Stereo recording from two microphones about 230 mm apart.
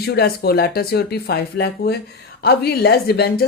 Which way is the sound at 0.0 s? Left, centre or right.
Left.